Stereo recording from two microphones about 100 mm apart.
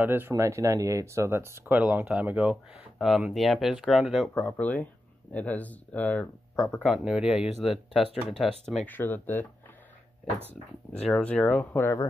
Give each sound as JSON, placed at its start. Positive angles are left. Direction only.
{"t": 0.0, "sound": "speech", "side_deg": -20}
{"t": 4.6, "sound": "speech", "side_deg": 15}
{"t": 8.8, "sound": "speech", "side_deg": 20}
{"t": 11.1, "sound": "speech", "side_deg": 10}